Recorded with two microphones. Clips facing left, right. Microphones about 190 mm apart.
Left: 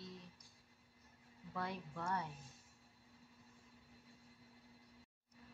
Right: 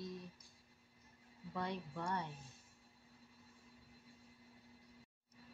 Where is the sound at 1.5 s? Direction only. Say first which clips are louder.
Right 2 dB; centre (ahead or behind).